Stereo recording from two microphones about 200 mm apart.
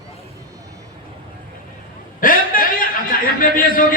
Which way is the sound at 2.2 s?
45° left (ahead or behind).